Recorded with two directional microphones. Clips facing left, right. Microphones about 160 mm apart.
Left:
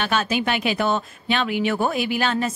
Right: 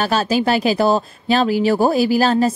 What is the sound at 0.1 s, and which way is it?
Speech, 35° right (ahead or behind).